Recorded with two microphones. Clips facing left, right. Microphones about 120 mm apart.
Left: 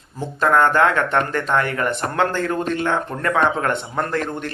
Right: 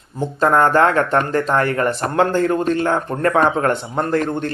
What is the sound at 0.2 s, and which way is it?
Speech, 30° right (ahead or behind).